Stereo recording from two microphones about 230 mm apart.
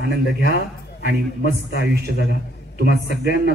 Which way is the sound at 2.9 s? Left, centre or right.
Left.